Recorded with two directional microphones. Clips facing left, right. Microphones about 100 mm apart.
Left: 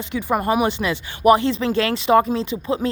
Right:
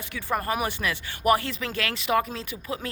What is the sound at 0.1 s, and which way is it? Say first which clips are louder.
Speech: left 7 dB; 15° left (ahead or behind).